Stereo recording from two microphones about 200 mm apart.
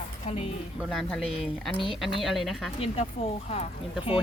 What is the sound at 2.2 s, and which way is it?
Speech, centre (ahead or behind).